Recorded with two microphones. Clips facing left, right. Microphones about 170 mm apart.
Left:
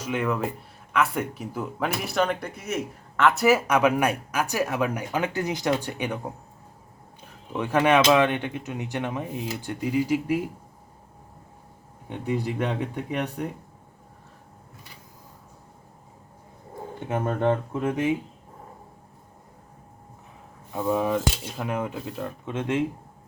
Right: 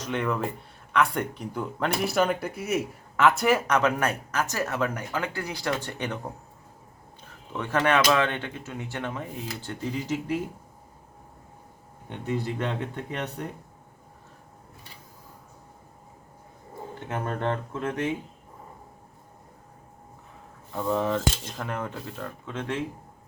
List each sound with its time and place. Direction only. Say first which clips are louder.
0.0 s speech: left 2 dB; 5° left (ahead or behind)
7.5 s speech: left 3 dB; 15° left (ahead or behind)
12.0 s speech: left 2 dB; 10° left (ahead or behind)
17.0 s speech: left 5 dB; 15° left (ahead or behind)
20.7 s speech: left 2 dB; 10° left (ahead or behind)